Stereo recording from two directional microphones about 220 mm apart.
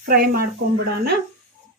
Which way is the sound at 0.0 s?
45° right (ahead or behind).